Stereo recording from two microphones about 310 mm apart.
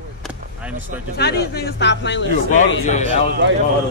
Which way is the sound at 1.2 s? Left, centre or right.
Left.